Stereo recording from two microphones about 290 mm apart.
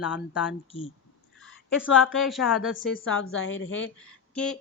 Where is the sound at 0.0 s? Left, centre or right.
Centre.